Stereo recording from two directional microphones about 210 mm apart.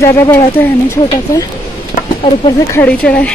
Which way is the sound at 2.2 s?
25° left (ahead or behind).